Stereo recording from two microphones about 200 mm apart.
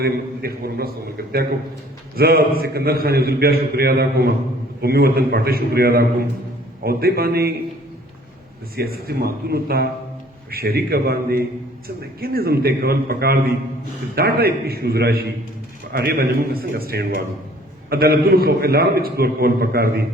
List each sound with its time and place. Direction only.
0.0 s a man's voice: 50° right (ahead or behind)
8.7 s a man's voice: 50° right (ahead or behind)